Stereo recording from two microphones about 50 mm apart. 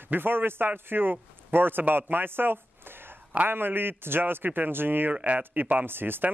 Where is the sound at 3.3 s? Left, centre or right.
Right.